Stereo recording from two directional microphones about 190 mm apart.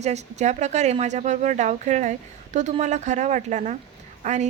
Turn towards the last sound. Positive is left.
turn(degrees=-40)  # may be behind; listen again after turning